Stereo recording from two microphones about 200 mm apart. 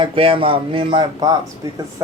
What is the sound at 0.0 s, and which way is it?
Speech, 25° right (ahead or behind).